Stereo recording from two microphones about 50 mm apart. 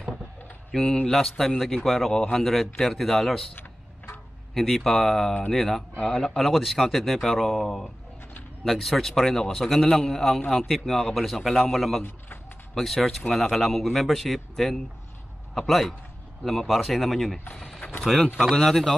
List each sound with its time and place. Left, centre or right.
0.7 s speech: centre
3.5 s a sound: left
4.6 s speech: centre
18.4 s speech: centre